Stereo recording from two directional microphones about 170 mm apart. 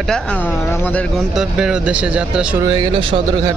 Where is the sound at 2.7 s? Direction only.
30° right (ahead or behind).